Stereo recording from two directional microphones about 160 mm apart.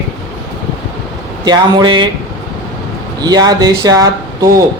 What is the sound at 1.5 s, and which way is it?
Speech, 30° right (ahead or behind).